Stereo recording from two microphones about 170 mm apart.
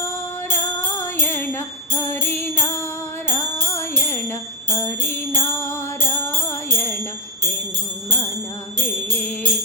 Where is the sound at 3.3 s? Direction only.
15° left (ahead or behind).